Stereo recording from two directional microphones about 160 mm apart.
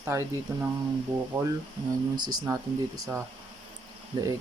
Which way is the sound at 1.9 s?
25° right (ahead or behind).